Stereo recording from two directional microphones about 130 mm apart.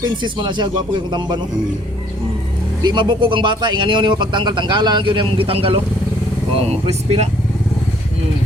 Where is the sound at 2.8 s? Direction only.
35° right (ahead or behind); by 7.2 s 55° right (ahead or behind).